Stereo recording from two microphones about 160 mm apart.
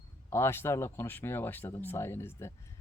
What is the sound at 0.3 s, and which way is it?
Speech, 15° left (ahead or behind).